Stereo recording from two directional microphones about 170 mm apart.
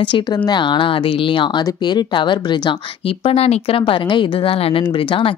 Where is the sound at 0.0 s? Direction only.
30° left (ahead or behind).